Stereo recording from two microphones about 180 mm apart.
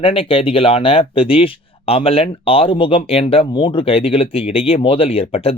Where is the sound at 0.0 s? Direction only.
30° left (ahead or behind).